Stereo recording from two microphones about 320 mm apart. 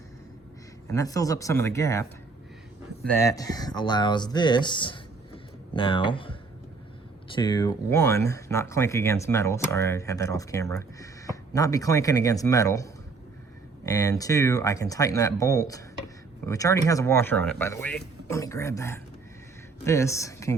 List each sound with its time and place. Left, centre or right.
0.9 s speech: centre